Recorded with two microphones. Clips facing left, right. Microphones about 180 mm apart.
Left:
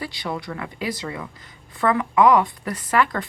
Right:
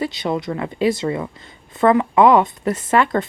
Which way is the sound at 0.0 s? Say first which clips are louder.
Right 7 dB; 20° right (ahead or behind).